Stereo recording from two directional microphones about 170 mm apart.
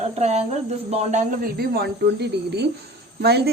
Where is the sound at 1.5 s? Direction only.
65° right (ahead or behind).